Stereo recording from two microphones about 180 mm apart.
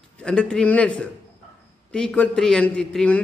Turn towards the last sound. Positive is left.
turn(degrees=5)  # may be behind; listen again after turning